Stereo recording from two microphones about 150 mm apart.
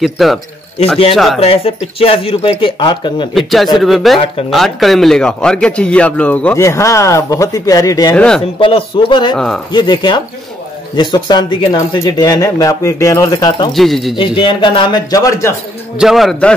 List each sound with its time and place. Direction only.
0.0 s a man's voice: centre (ahead or behind)
1.4 s speech: 40° left (ahead or behind)
3.3 s a man's voice: centre (ahead or behind)
6.6 s speech: 20° left (ahead or behind)
8.1 s speech: 5° left (ahead or behind)
8.5 s speech: 35° left (ahead or behind)
13.7 s a man's voice: centre (ahead or behind)
14.1 s speech: 35° left (ahead or behind)
16.0 s a man's voice: centre (ahead or behind)